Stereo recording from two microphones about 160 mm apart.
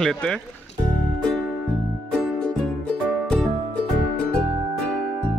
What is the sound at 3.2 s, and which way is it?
Music, 5° left (ahead or behind).